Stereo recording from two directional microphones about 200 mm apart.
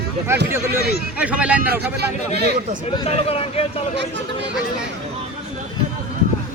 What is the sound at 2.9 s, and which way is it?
Speech, 30° left (ahead or behind).